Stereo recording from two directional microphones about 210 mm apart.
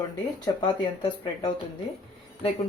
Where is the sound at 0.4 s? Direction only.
20° left (ahead or behind).